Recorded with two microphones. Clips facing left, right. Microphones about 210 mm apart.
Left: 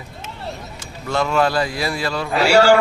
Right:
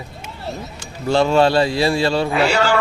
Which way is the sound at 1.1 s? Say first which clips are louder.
Right 4 dB; 30° right (ahead or behind).